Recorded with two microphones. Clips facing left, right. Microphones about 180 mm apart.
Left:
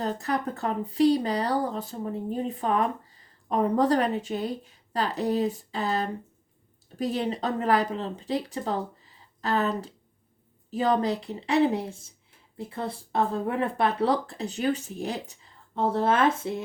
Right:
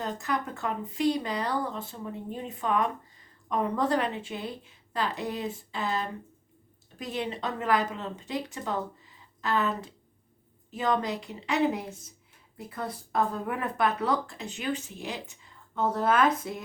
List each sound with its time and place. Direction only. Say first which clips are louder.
0.0 s speech: left 3 dB; 35° left (ahead or behind)